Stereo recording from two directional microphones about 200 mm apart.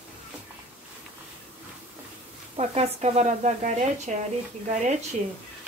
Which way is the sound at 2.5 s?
30° right (ahead or behind).